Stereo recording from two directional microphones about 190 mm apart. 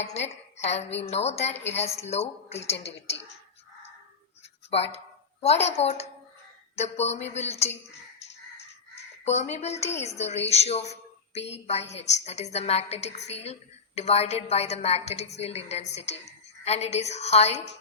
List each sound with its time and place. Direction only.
0.0 s a woman's voice: 35° left (ahead or behind)
4.7 s a woman's voice: 35° left (ahead or behind)
9.2 s a woman's voice: 35° left (ahead or behind)